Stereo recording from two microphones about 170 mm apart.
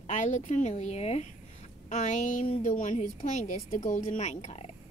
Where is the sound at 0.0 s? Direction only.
45° left (ahead or behind).